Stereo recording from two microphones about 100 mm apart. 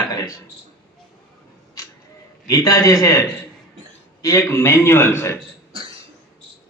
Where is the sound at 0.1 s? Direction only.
35° left (ahead or behind).